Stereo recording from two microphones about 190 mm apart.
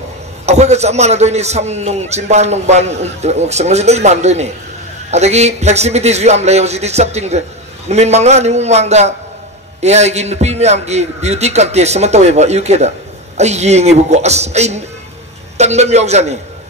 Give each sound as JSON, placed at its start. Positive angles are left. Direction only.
{"t": 0.5, "sound": "a man's voice", "side_deg": -35}